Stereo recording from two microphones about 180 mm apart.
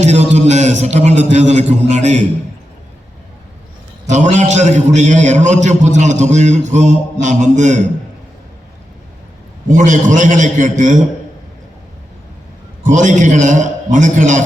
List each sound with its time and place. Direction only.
0.0 s a man's voice: 40° right (ahead or behind)
4.1 s a man's voice: 40° right (ahead or behind)
9.7 s a man's voice: 45° right (ahead or behind)
12.8 s a man's voice: 45° right (ahead or behind)